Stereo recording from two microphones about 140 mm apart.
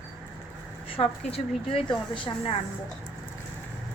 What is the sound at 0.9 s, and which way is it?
A woman's voice, 40° left (ahead or behind).